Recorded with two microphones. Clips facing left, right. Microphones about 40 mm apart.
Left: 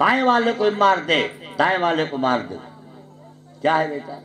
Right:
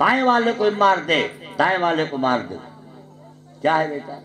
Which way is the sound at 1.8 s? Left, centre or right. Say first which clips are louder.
Even; left.